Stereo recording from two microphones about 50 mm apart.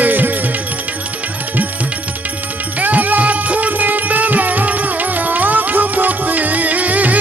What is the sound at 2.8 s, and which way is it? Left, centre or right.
Music, right.